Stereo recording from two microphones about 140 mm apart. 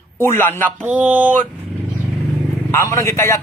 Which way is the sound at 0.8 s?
10° right (ahead or behind).